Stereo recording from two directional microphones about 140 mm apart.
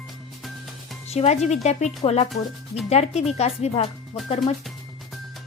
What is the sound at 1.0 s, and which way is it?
Speech, 50° left (ahead or behind).